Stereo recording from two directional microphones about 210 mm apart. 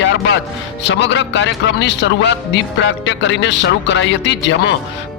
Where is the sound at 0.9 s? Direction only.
60° left (ahead or behind).